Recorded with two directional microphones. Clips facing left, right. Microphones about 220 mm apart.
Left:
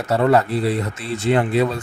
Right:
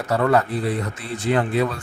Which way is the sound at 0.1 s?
25° left (ahead or behind).